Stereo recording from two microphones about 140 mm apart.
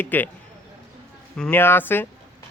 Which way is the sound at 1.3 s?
5° left (ahead or behind).